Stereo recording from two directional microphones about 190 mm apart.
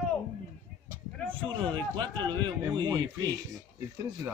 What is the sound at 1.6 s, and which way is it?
A man's voice, 25° right (ahead or behind).